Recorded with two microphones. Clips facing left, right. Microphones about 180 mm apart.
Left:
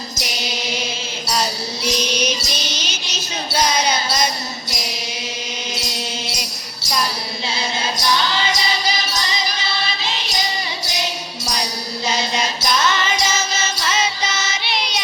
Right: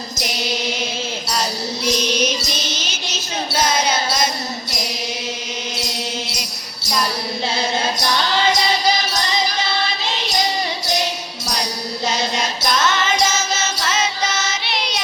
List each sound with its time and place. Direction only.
1.3 s music: 5° left (ahead or behind)
2.7 s a sound: 5° right (ahead or behind)
7.4 s music: 55° right (ahead or behind)
12.0 s mantra: 50° right (ahead or behind)
13.9 s music: centre (ahead or behind)